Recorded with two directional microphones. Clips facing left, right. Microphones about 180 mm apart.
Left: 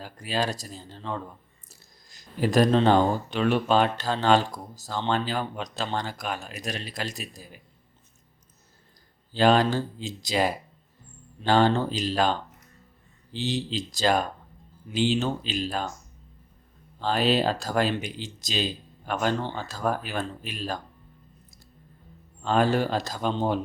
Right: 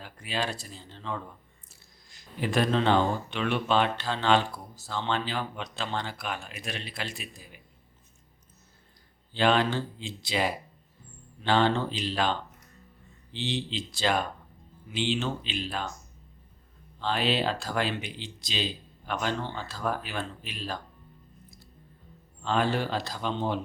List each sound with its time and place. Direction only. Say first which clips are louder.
0.0 s speech: left 4 dB; 40° left (ahead or behind)
9.3 s speech: left 4 dB; 40° left (ahead or behind)
17.0 s speech: left 4 dB; 40° left (ahead or behind)
22.4 s speech: left 4 dB; 45° left (ahead or behind)